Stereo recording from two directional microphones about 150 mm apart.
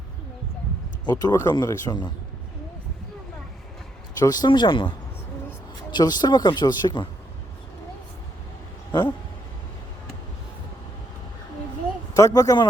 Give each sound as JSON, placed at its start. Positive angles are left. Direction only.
{"t": 1.0, "sound": "speech", "side_deg": 25}
{"t": 4.2, "sound": "speech", "side_deg": 25}
{"t": 8.9, "sound": "speech", "side_deg": 30}
{"t": 12.1, "sound": "speech", "side_deg": 20}